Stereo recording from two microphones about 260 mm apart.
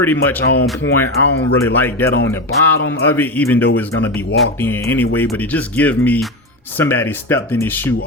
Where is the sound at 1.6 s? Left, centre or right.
Centre.